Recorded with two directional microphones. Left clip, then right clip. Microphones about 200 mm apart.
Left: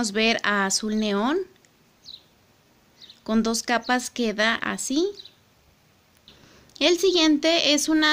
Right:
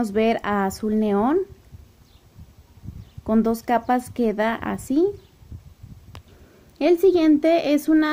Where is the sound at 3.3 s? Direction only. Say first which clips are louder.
Right 3 dB; centre (ahead or behind).